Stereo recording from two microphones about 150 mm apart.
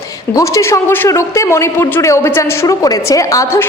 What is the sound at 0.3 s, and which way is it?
A man's voice, 20° left (ahead or behind).